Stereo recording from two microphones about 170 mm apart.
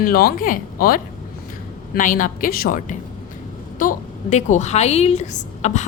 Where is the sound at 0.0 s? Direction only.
60° left (ahead or behind).